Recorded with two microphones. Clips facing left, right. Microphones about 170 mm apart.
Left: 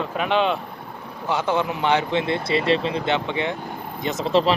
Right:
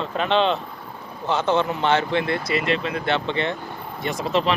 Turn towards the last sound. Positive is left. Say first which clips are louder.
# left 2 dB
turn(degrees=35)  # may be behind; listen again after turning